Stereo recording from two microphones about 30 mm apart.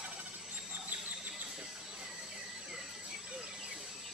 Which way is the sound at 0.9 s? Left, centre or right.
Right.